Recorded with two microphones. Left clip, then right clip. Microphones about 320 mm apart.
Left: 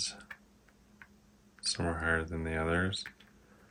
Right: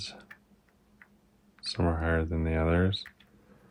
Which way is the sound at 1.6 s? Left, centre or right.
Right.